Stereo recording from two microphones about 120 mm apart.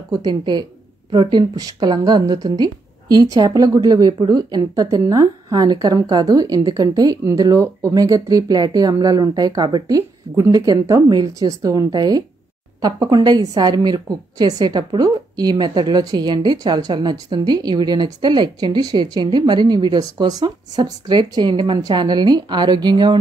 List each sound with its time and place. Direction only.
0.1 s a woman's voice: 35° right (ahead or behind)